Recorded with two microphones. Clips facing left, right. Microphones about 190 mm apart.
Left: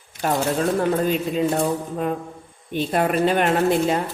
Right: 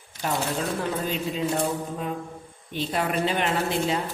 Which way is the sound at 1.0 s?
60° left (ahead or behind).